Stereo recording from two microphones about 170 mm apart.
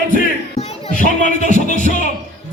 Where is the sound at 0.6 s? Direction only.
45° left (ahead or behind).